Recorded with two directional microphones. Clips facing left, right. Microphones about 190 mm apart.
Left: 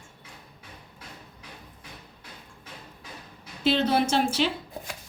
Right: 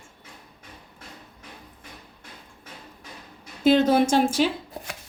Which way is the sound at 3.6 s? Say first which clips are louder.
Right 5 dB; 45° right (ahead or behind).